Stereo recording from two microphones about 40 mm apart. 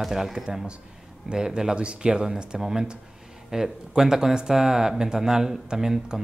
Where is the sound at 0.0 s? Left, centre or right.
Centre.